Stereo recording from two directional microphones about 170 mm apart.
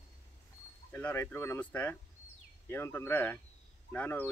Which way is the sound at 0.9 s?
10° left (ahead or behind).